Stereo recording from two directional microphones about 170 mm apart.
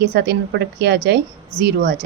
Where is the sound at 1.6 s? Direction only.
60° right (ahead or behind).